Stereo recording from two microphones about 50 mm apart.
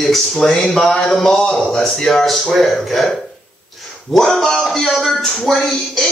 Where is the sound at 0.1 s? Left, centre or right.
Centre.